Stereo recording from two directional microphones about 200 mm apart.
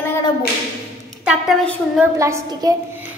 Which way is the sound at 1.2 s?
Centre (ahead or behind).